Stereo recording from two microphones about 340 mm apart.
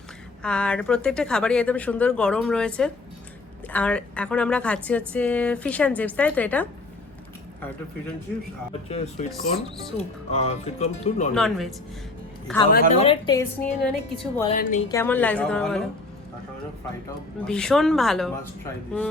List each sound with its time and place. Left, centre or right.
0.4 s speech: centre
8.9 s speech: centre
11.3 s speech: centre
12.9 s a woman's voice: centre
14.5 s speech: left
14.9 s speech: centre
17.4 s speech: centre